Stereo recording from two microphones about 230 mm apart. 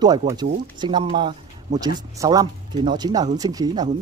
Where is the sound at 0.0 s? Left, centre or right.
Centre.